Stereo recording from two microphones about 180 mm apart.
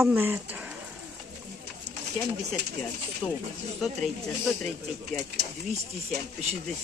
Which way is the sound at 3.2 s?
5° left (ahead or behind).